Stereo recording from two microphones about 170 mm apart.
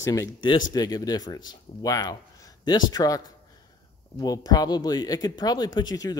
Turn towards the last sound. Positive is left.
turn(degrees=25)  # may be behind; listen again after turning